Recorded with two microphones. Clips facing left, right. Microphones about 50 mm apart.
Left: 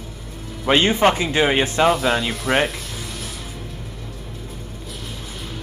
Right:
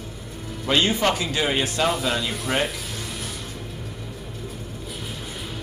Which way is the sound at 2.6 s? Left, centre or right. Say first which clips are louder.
Left 3 dB; centre.